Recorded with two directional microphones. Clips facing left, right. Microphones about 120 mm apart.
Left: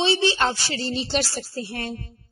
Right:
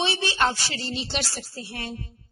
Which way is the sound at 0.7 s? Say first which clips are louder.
Left 5 dB; 35° left (ahead or behind).